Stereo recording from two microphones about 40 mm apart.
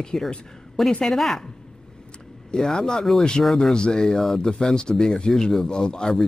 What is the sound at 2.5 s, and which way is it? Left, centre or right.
A man's voice, centre.